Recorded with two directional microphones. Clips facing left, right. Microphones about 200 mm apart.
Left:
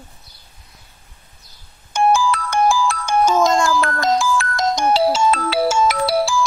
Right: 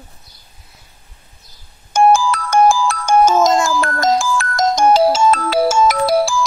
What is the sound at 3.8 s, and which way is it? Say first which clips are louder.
Ringtone: right 2 dB; 45° right (ahead or behind).